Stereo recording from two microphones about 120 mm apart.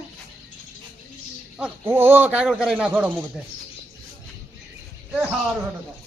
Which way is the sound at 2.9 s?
15° right (ahead or behind).